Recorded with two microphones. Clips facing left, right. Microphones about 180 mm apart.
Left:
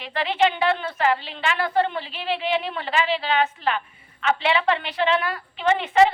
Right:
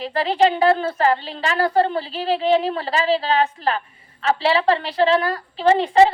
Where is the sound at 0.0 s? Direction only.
40° right (ahead or behind).